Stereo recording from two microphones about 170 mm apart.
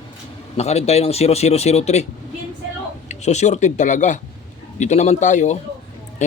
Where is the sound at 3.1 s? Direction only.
40° left (ahead or behind).